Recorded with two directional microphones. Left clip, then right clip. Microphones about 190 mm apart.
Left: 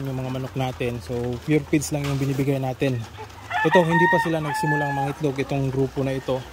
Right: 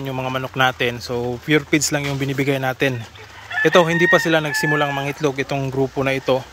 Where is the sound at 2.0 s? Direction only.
50° right (ahead or behind).